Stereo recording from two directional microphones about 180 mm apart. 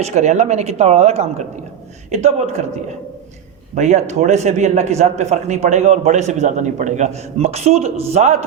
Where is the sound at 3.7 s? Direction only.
40° right (ahead or behind).